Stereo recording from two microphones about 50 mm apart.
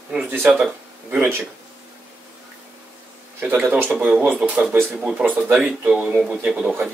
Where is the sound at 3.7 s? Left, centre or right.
Right.